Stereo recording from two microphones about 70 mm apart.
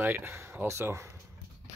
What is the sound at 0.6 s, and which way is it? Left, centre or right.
Speech, right.